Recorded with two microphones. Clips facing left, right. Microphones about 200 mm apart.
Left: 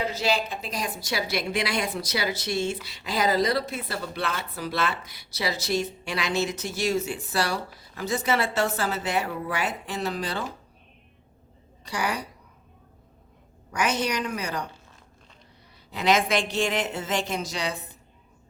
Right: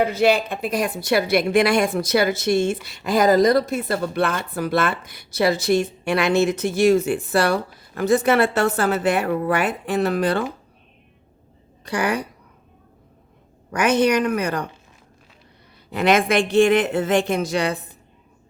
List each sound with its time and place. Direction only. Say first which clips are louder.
0.0 s a woman's voice: right 8 dB; 55° right (ahead or behind)
11.9 s a woman's voice: right 7 dB; 55° right (ahead or behind)
13.7 s a woman's voice: right 9 dB; 55° right (ahead or behind)
15.9 s a woman's voice: right 5 dB; 55° right (ahead or behind)